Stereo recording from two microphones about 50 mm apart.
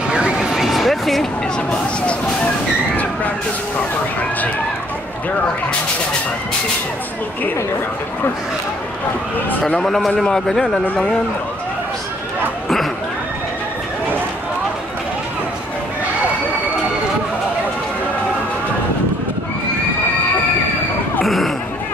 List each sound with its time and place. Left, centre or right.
0.1 s vehicle: centre
1.7 s a man's voice: centre
9.5 s a man's voice: left
9.8 s a man's voice: centre
21.2 s a sound: centre